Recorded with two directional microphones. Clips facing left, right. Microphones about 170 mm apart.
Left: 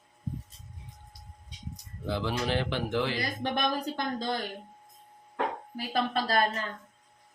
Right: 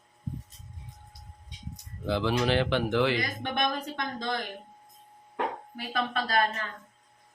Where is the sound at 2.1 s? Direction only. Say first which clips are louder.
Right 4 dB; 85° right; by 3.2 s 70° right (ahead or behind).